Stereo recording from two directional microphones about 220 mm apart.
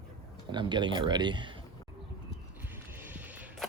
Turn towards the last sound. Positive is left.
turn(degrees=-5)  # may be behind; listen again after turning